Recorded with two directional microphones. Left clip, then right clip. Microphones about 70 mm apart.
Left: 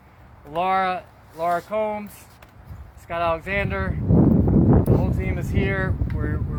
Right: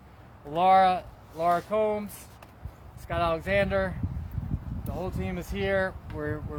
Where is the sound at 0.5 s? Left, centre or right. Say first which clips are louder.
Right 1 dB; right.